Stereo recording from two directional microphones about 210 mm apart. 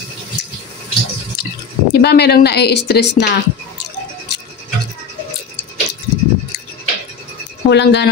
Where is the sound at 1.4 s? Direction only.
50° left (ahead or behind).